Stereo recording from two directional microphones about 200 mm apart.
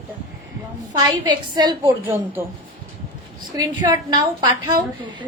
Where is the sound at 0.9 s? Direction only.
20° right (ahead or behind).